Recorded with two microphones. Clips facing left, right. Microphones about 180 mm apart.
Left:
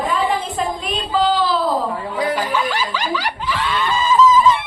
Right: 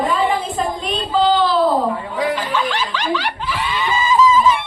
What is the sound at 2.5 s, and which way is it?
Snicker, 10° left (ahead or behind).